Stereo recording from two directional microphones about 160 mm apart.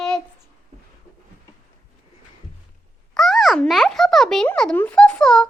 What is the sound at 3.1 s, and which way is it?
A child's voice, centre (ahead or behind).